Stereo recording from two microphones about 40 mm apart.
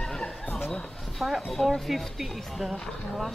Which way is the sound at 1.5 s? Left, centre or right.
Centre.